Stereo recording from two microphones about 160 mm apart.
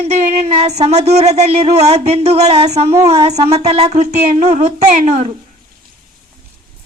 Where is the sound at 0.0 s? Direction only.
40° right (ahead or behind).